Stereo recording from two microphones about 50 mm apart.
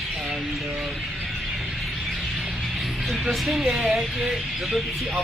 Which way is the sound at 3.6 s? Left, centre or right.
Centre.